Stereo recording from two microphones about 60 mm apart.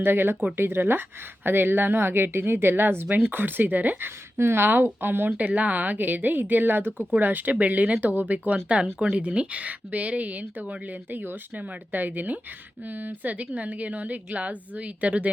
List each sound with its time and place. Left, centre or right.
0.0 s a woman's voice: right
4.4 s a woman's voice: right
5.4 s a woman's voice: right
8.7 s a woman's voice: centre